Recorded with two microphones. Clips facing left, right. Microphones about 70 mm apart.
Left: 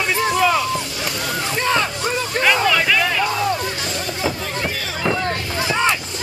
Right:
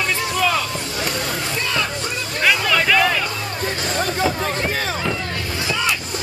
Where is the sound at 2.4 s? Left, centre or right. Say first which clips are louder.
Left 1 dB; centre.